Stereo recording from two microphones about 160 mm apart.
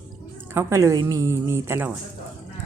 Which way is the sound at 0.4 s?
15° right (ahead or behind).